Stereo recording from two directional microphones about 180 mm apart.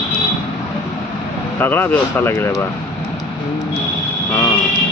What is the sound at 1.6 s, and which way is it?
Speech, 10° left (ahead or behind).